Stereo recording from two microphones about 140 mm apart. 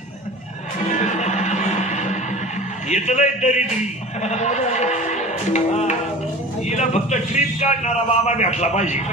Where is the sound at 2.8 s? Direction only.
55° left (ahead or behind).